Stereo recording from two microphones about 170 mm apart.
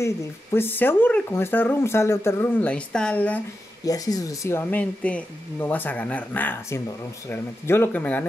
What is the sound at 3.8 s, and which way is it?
A child's voice, 20° left (ahead or behind).